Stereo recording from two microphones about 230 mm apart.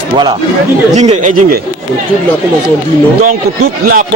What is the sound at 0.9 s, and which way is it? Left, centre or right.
Speech, right.